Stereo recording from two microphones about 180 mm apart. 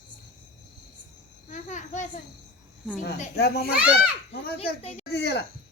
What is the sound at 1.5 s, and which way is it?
Speech, 45° left (ahead or behind).